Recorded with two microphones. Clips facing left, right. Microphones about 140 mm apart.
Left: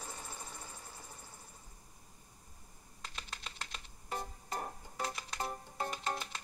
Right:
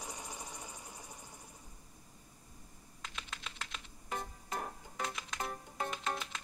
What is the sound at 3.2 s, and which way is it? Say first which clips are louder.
Typing: right 1 dB; 40° left (ahead or behind).